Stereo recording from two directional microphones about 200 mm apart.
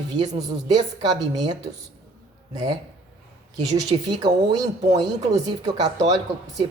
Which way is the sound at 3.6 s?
20° right (ahead or behind).